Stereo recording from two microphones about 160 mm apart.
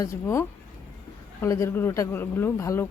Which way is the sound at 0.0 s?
20° left (ahead or behind).